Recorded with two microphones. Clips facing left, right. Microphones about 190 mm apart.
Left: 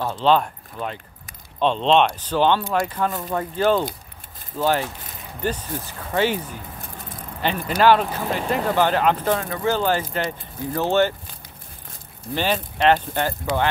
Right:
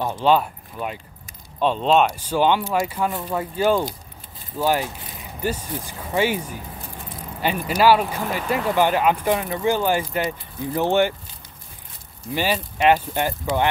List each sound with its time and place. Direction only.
0.0 s speech: 15° right (ahead or behind)
12.4 s speech: 10° right (ahead or behind)